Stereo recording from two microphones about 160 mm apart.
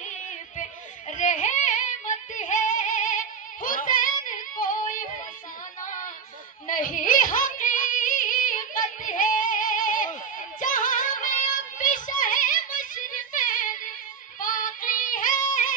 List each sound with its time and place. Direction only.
0.6 s a sound: 50° left (ahead or behind)
3.6 s child singing: 55° left (ahead or behind)
6.7 s music: 55° left (ahead or behind)
14.4 s female singing: 55° left (ahead or behind)